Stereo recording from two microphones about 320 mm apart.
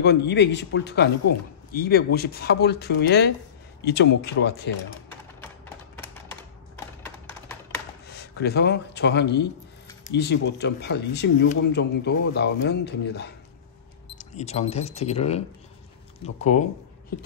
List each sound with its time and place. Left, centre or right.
0.0 s speech: left
7.0 s a sound: centre
8.1 s speech: left
14.1 s speech: left